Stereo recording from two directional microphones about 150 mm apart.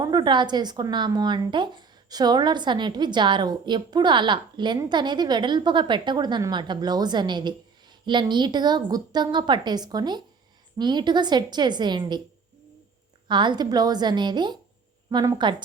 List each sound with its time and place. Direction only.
0.0 s a woman's voice: 30° right (ahead or behind)
13.2 s a woman's voice: 30° right (ahead or behind)